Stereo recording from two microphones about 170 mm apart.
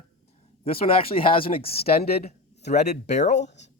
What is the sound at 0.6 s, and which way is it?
Speech, 35° left (ahead or behind).